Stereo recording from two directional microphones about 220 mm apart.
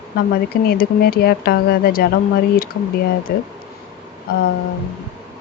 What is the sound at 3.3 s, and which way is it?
Speech, 45° left (ahead or behind).